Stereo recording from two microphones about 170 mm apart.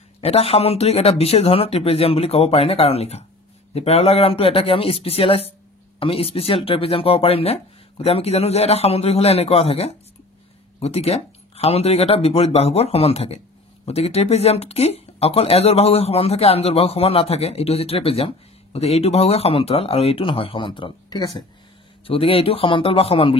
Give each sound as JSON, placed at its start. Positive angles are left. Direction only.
{"t": 0.2, "sound": "speech", "side_deg": 35}